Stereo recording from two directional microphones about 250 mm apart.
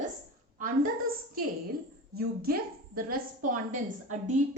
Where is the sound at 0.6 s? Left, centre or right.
Right.